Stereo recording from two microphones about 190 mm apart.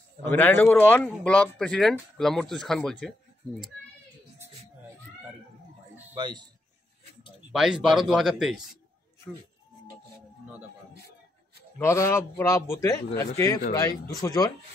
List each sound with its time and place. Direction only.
0.3 s speech: 10° left (ahead or behind)
6.1 s a man's voice: 25° right (ahead or behind)
7.5 s speech: centre (ahead or behind)
11.8 s a man's voice: 15° left (ahead or behind)